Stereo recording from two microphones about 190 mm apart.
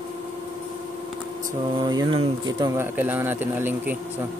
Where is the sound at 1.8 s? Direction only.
25° right (ahead or behind).